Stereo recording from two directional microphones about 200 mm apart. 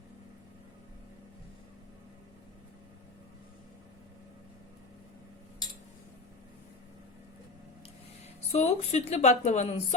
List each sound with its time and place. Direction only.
8.5 s speech: 35° left (ahead or behind)